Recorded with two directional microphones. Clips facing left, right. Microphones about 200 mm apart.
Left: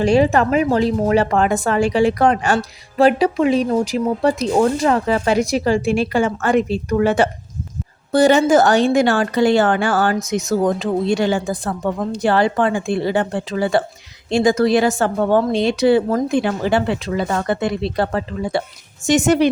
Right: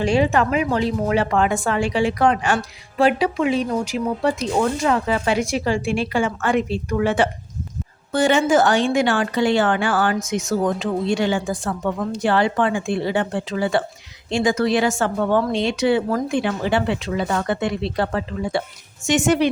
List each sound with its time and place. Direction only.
0.0 s speech: 40° left (ahead or behind)